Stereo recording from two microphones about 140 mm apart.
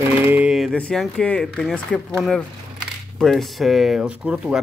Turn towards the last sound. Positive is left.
turn(degrees=-5)  # may be behind; listen again after turning